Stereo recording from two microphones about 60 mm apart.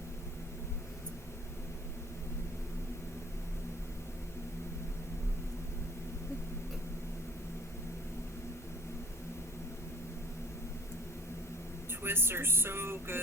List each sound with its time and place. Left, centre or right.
12.0 s speech: right